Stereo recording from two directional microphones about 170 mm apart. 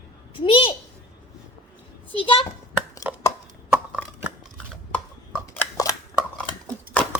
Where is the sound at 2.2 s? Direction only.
30° left (ahead or behind).